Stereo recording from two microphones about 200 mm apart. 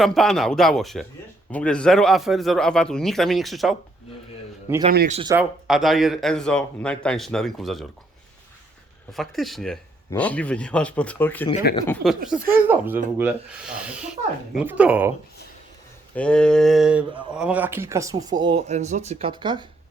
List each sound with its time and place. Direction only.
0.0 s speech: centre (ahead or behind)
4.9 s speech: 45° right (ahead or behind)
5.3 s speech: 5° right (ahead or behind)
9.1 s speech: centre (ahead or behind)
16.1 s speech: 5° left (ahead or behind); by 19.6 s 25° right (ahead or behind)